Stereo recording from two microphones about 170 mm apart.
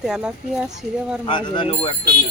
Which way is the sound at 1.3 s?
30° left (ahead or behind).